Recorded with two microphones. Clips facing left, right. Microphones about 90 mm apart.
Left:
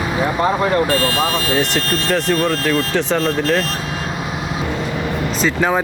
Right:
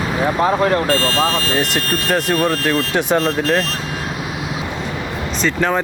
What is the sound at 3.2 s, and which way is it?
Speech, 35° right (ahead or behind).